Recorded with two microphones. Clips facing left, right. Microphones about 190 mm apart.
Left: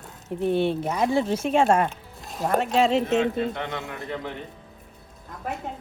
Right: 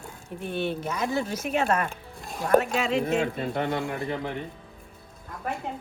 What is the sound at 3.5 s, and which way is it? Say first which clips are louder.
Speech: right 4 dB; 50° right (ahead or behind).